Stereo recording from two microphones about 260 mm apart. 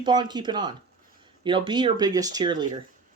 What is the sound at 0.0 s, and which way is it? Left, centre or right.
Speech, centre.